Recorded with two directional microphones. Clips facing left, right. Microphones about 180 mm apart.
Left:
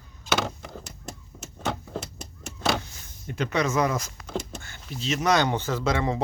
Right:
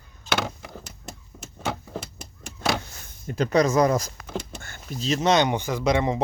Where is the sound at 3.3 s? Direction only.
35° right (ahead or behind).